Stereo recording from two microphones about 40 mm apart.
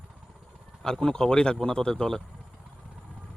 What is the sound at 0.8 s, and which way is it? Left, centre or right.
Speech, centre.